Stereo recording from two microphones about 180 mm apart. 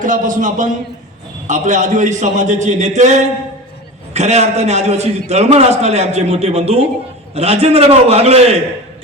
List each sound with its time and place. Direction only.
0.0 s a man's voice: 45° right (ahead or behind)